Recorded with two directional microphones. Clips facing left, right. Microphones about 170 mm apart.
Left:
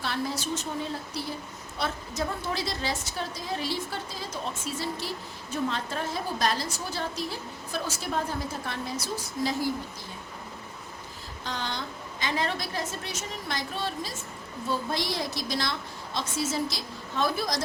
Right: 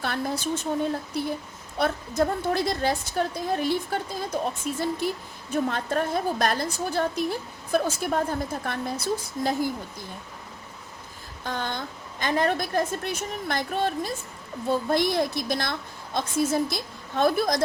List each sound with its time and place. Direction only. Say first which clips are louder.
0.0 s a woman's voice: right 3 dB; 55° right (ahead or behind)
11.4 s a woman's voice: right 3 dB; 50° right (ahead or behind)